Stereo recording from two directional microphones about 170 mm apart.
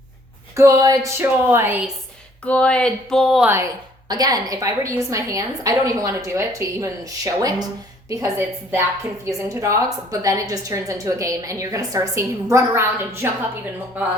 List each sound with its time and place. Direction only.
0.5 s speech: 20° right (ahead or behind)
2.4 s speech: 5° left (ahead or behind)
3.4 s a woman's voice: 15° right (ahead or behind)